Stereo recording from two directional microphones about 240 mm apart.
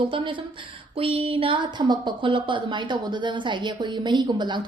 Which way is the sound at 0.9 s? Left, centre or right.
Right.